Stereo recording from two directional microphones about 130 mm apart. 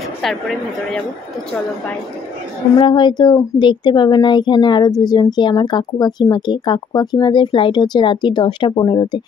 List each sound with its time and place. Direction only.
2.8 s speech: 35° left (ahead or behind)